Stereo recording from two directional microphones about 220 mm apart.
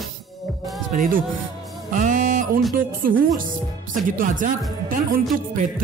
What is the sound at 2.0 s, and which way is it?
Music, 35° right (ahead or behind).